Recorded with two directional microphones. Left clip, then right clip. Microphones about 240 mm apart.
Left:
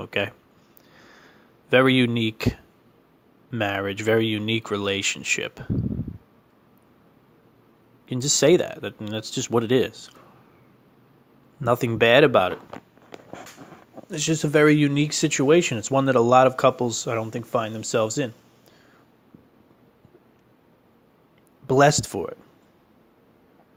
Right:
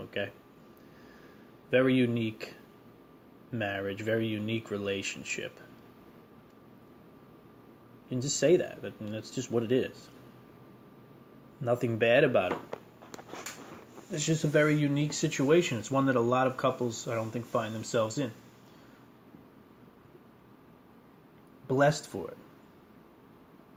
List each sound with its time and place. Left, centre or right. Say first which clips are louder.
0.0 s speech: left 9 dB; left
1.7 s speech: left 8 dB; left
3.5 s speech: left 8 dB; left
8.1 s speech: left 7 dB; left
11.6 s speech: left 8 dB; left
14.1 s speech: left 7 dB; left
21.7 s speech: left 9 dB; left